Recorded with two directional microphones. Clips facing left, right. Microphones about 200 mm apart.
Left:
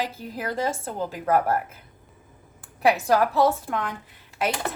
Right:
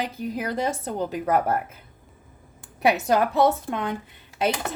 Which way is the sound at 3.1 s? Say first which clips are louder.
Right 1 dB; 20° right (ahead or behind).